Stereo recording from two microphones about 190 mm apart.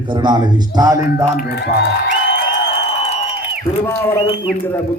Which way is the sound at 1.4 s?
60° left (ahead or behind).